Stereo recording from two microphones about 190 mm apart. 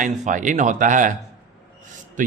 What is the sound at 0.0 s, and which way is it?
A man's voice, 45° right (ahead or behind).